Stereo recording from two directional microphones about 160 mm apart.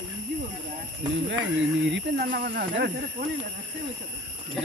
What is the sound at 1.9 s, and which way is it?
Speech, 90° right.